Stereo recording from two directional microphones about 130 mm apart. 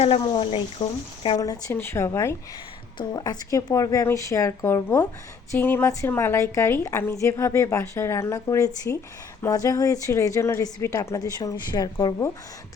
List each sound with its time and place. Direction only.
0.0 s speech: 45° left (ahead or behind)
1.7 s a woman's voice: 20° left (ahead or behind)
3.0 s a woman's voice: 35° left (ahead or behind)